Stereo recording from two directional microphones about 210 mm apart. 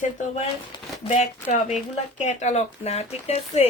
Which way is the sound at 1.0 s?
30° left (ahead or behind).